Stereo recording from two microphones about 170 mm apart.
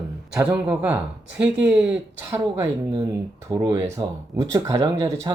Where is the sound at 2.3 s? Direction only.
15° right (ahead or behind).